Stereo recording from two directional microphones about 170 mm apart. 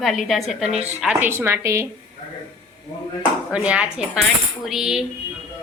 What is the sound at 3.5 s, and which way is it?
A woman's voice, 5° right (ahead or behind).